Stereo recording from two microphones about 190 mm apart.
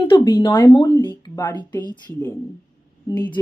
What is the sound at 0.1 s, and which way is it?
Speech, 25° left (ahead or behind).